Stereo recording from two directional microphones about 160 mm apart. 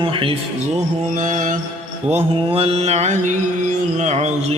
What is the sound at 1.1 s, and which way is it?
Mantra, 50° right (ahead or behind).